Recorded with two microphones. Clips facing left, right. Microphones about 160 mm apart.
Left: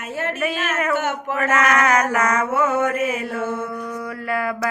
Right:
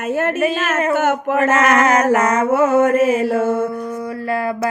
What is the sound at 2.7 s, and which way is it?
Speech, 50° right (ahead or behind).